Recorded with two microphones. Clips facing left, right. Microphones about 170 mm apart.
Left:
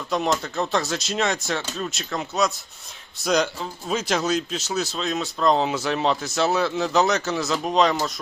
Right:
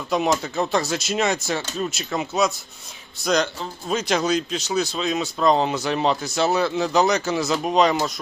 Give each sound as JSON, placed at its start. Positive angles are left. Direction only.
{"t": 0.1, "sound": "speech", "side_deg": -5}